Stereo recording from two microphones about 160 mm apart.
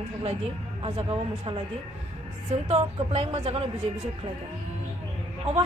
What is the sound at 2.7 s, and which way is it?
Speech, 40° right (ahead or behind).